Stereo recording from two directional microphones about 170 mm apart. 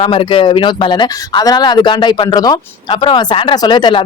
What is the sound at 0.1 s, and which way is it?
Speech, 30° left (ahead or behind).